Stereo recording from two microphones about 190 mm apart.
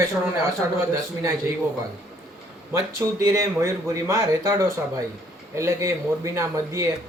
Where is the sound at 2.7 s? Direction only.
15° right (ahead or behind).